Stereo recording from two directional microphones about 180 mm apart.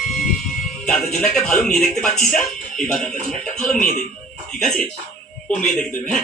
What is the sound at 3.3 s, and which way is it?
Speech, 5° left (ahead or behind).